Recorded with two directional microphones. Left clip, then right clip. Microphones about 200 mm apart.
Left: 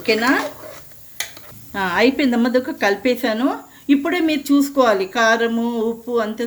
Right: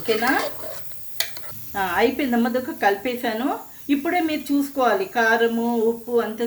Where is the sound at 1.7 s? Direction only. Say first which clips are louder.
Left 3 dB; 55° left (ahead or behind).